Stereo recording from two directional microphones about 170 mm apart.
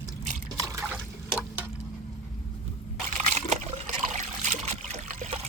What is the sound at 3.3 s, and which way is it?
Trickle, 40° right (ahead or behind).